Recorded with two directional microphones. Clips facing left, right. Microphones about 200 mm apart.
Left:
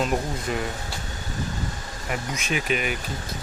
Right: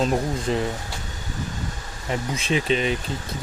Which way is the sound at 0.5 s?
30° right (ahead or behind).